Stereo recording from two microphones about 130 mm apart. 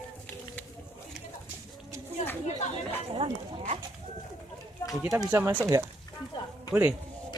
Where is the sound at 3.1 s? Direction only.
45° right (ahead or behind).